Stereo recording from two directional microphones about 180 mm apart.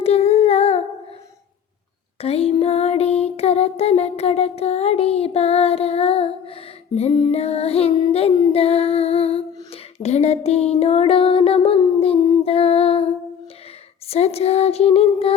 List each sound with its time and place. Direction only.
0.0 s humming: 35° left (ahead or behind)
2.2 s music: 35° left (ahead or behind)